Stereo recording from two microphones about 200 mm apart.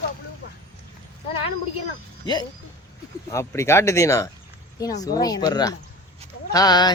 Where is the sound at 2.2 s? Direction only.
20° left (ahead or behind).